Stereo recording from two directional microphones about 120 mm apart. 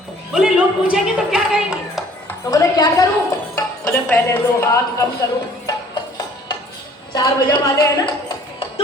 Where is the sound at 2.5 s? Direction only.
30° left (ahead or behind).